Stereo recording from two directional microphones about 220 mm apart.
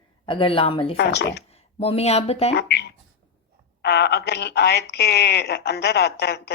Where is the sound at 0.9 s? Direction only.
50° left (ahead or behind).